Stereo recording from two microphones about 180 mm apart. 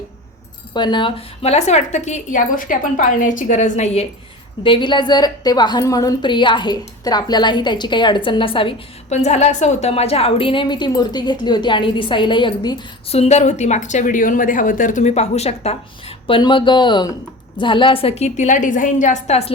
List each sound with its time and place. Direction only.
0.7 s a woman's voice: 25° left (ahead or behind)
4.6 s a woman's voice: 25° left (ahead or behind)